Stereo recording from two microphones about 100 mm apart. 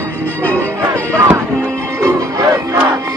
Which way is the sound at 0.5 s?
25° right (ahead or behind).